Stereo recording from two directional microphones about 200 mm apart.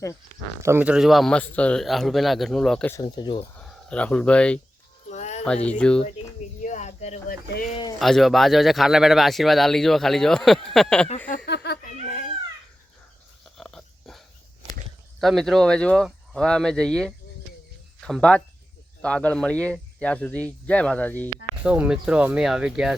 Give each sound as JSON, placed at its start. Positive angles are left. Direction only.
{"t": 0.6, "sound": "speech", "side_deg": -10}
{"t": 2.9, "sound": "speech", "side_deg": 20}
{"t": 3.5, "sound": "speech", "side_deg": 5}
{"t": 5.0, "sound": "music", "side_deg": 35}
{"t": 5.6, "sound": "speech", "side_deg": 5}
{"t": 6.6, "sound": "a sound", "side_deg": 40}
{"t": 7.3, "sound": "speech", "side_deg": 45}
{"t": 7.7, "sound": "speech", "side_deg": 20}
{"t": 7.9, "sound": "speech", "side_deg": 0}
{"t": 11.4, "sound": "giggle", "side_deg": 55}
{"t": 11.9, "sound": "baby cry", "side_deg": 40}
{"t": 13.4, "sound": "dog", "side_deg": 0}
{"t": 15.2, "sound": "speech", "side_deg": 0}
{"t": 21.6, "sound": "speech", "side_deg": -5}